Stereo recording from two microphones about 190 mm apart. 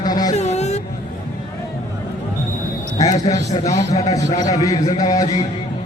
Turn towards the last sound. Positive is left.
turn(degrees=20)  # may be behind; listen again after turning